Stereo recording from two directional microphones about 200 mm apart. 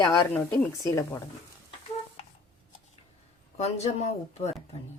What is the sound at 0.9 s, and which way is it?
Speech, 15° left (ahead or behind).